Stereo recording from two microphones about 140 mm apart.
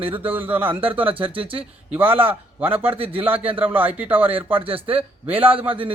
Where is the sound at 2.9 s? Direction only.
45° right (ahead or behind).